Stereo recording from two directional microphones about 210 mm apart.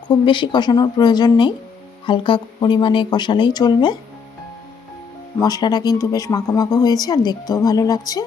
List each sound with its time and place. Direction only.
0.1 s speech: 20° left (ahead or behind)
5.4 s speech: 20° left (ahead or behind)